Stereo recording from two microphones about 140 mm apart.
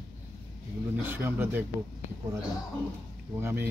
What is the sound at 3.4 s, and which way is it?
Speech, 15° right (ahead or behind).